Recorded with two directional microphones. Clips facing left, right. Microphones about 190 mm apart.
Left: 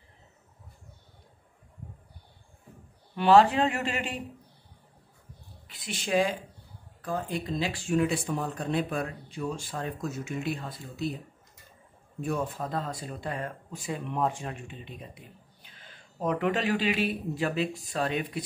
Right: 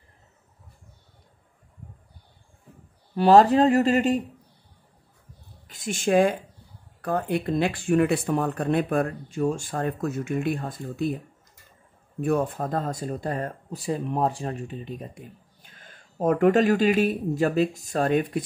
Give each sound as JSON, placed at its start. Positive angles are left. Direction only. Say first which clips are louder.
{"t": 3.2, "sound": "speech", "louder": "right 4 dB", "side_deg": -40}
{"t": 5.7, "sound": "speech", "louder": "right 7 dB", "side_deg": -45}
{"t": 7.0, "sound": "speech", "louder": "right 6 dB", "side_deg": -65}
{"t": 12.2, "sound": "speech", "louder": "right 7 dB", "side_deg": -55}